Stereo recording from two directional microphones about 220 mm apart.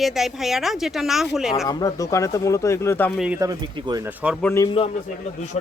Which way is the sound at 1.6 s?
15° left (ahead or behind).